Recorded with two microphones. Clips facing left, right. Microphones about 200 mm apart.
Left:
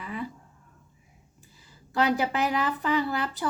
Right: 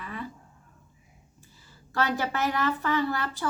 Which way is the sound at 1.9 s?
15° left (ahead or behind).